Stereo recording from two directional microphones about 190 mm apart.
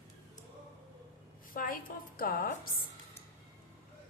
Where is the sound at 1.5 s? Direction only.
50° left (ahead or behind).